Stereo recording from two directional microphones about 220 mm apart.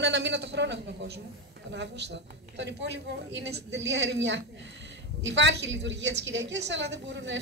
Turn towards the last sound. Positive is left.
turn(degrees=-55)  # may be behind; listen again after turning